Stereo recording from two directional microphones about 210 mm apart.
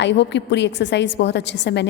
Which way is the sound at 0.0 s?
55° left (ahead or behind).